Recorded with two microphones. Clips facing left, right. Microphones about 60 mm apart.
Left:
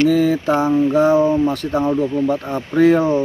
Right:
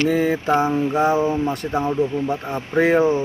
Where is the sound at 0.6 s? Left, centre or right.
Right.